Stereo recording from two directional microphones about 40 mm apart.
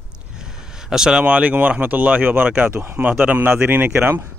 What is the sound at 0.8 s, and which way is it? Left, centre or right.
Speech, centre.